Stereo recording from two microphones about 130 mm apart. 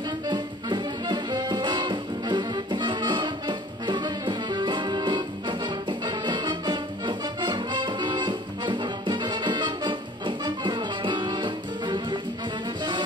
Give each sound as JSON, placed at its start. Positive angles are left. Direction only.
{"t": 0.3, "sound": "music", "side_deg": -35}